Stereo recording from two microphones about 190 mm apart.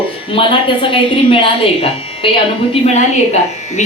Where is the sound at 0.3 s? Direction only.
25° left (ahead or behind).